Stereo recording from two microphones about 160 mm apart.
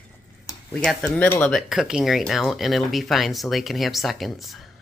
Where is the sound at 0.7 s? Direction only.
5° left (ahead or behind).